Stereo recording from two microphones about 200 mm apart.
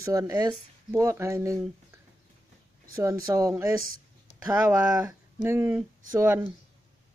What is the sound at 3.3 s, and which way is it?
Speech, 15° right (ahead or behind).